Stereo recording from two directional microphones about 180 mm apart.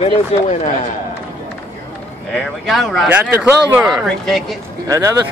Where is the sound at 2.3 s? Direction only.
Centre (ahead or behind).